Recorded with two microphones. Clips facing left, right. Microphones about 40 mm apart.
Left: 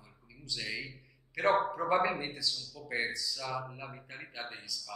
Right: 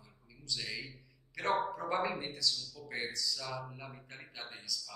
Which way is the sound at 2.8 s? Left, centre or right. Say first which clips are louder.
Left 5 dB; centre.